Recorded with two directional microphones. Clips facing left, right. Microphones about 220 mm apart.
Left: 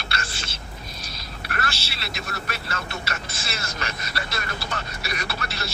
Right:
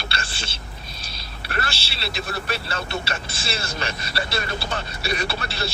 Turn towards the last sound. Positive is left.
turn(degrees=-30)  # may be behind; listen again after turning